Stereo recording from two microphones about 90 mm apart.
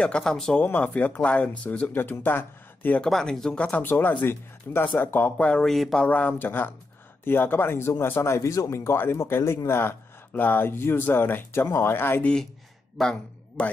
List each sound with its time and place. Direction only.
0.0 s speech: 10° left (ahead or behind)
0.6 s speech: 15° left (ahead or behind)
3.0 s speech: 5° left (ahead or behind)
6.0 s speech: 15° left (ahead or behind)
13.0 s speech: 10° left (ahead or behind)